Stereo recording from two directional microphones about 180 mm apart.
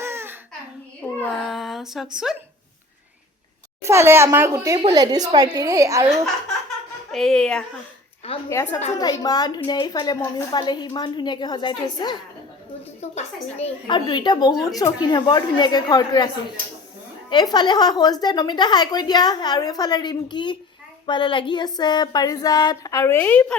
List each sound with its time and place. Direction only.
0.0 s babbling: 15° right (ahead or behind)
1.2 s female singing: centre (ahead or behind)
2.1 s a woman's voice: 5° right (ahead or behind)
3.8 s a woman's voice: 15° right (ahead or behind)
7.1 s a woman's voice: centre (ahead or behind)
8.4 s a woman's voice: 15° left (ahead or behind)
13.0 s a woman's voice: 35° left (ahead or behind); by 23.6 s 10° left (ahead or behind)